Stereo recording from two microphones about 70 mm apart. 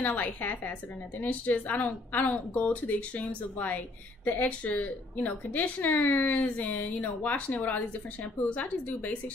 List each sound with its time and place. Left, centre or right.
0.0 s a woman's voice: left